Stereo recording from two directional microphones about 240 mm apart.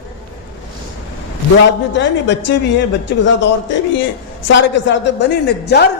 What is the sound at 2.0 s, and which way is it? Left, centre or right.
Speech, left.